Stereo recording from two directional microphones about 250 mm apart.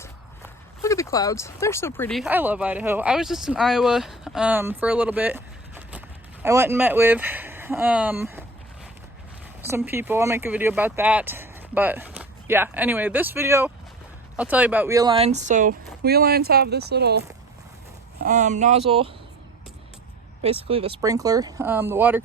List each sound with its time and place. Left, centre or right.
0.0 s speech: centre
9.6 s speech: centre; by 17.2 s right
18.2 s speech: right
20.4 s speech: right; by 22.2 s centre